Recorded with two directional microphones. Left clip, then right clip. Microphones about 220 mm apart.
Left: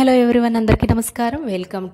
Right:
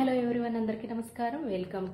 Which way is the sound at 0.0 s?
50° left (ahead or behind).